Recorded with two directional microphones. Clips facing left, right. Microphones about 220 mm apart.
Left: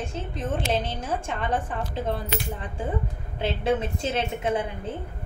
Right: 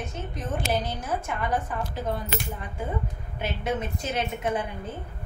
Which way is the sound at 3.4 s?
30° left (ahead or behind).